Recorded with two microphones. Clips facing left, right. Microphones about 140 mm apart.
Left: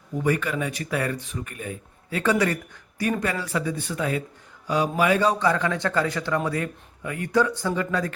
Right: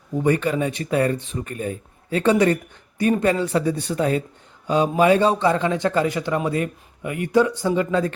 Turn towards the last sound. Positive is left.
turn(degrees=-20)  # may be behind; listen again after turning